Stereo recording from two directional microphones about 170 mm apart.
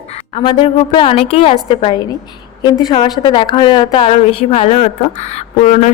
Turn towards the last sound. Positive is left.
turn(degrees=45)  # may be behind; listen again after turning